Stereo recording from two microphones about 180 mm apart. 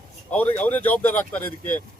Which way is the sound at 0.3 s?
10° left (ahead or behind).